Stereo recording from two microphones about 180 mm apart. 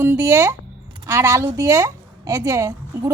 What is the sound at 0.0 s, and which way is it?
A woman's voice, 15° right (ahead or behind).